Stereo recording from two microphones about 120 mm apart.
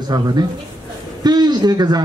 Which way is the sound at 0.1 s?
35° right (ahead or behind).